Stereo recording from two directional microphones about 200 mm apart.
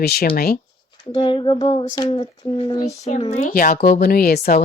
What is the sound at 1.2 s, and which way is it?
Speech, 25° left (ahead or behind).